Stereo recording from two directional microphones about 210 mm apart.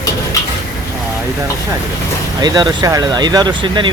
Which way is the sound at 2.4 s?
20° right (ahead or behind).